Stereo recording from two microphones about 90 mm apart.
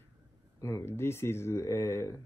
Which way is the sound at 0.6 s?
30° left (ahead or behind).